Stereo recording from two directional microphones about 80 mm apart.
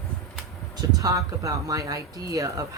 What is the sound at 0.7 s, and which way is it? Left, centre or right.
Speech, right.